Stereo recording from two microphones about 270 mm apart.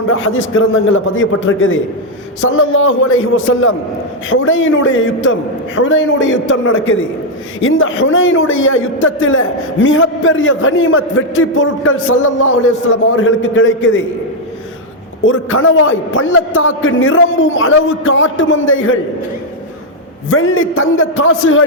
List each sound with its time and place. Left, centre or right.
0.1 s a man's voice: left
15.2 s a man's voice: left
20.3 s a man's voice: left